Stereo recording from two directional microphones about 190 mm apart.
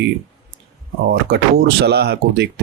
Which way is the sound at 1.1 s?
60° right (ahead or behind).